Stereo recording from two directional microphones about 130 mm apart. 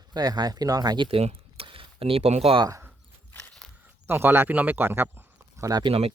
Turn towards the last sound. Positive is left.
turn(degrees=-45)  # may be behind; listen again after turning